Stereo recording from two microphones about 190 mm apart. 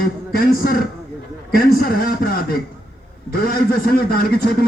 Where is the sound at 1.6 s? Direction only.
50° left (ahead or behind).